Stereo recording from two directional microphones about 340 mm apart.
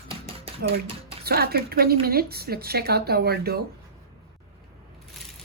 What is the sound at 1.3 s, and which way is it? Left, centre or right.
A woman's voice, right.